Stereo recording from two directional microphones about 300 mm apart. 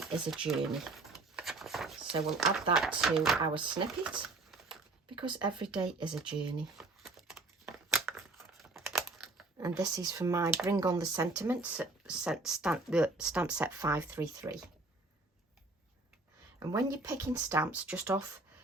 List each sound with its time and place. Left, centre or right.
0.0 s a sound: centre
2.2 s speech: centre
3.4 s speech: centre
4.0 s typing: centre
5.1 s speech: centre
6.7 s a sound: centre
8.5 s computer keyboard: centre
9.6 s speech: centre
16.6 s speech: centre